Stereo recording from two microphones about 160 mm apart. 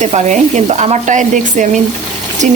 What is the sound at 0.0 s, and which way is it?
Speech, 45° right (ahead or behind).